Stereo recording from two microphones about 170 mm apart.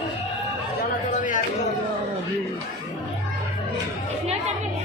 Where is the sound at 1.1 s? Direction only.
50° left (ahead or behind).